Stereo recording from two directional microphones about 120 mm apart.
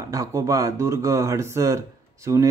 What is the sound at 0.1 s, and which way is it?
Speech, 25° right (ahead or behind).